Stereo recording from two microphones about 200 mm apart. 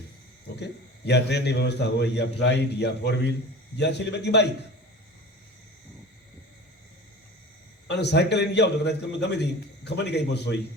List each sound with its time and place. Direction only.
0.6 s a man's voice: 60° left (ahead or behind)
7.9 s a man's voice: 60° left (ahead or behind)